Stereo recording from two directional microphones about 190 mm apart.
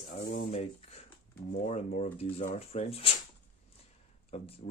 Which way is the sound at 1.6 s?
35° left (ahead or behind).